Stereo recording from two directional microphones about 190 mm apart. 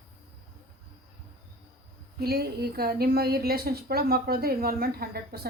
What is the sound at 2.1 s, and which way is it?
A woman's voice, 55° right (ahead or behind).